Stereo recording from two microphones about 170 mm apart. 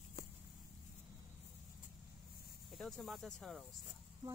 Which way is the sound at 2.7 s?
Centre (ahead or behind).